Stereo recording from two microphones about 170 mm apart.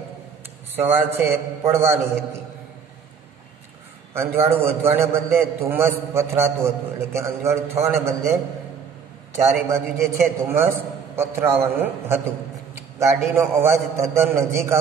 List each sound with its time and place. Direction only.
0.7 s a man's voice: 15° right (ahead or behind)
4.1 s a man's voice: 15° right (ahead or behind)
13.3 s a man's voice: 15° right (ahead or behind)